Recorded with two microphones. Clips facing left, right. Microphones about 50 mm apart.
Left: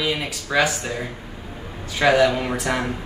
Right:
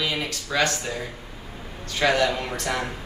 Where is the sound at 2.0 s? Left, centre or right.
Centre.